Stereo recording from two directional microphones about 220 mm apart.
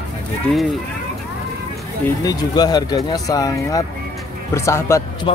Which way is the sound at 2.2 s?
20° left (ahead or behind).